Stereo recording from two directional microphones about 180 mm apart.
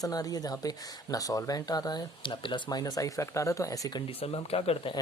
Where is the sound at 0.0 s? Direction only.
20° left (ahead or behind).